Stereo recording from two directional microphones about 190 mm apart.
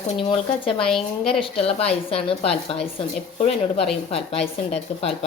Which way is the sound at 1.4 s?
30° left (ahead or behind).